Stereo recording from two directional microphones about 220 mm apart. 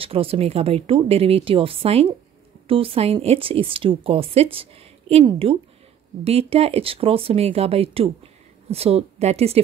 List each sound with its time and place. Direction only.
0.0 s a woman's voice: 25° right (ahead or behind)